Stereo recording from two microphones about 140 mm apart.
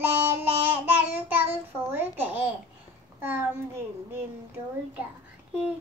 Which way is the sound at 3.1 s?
15° right (ahead or behind).